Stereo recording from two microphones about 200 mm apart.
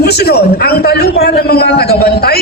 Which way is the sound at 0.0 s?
50° left (ahead or behind).